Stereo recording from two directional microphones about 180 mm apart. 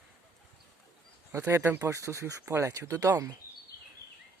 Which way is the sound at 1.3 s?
15° right (ahead or behind).